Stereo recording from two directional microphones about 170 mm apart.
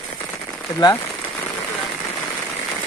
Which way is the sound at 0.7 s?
20° left (ahead or behind).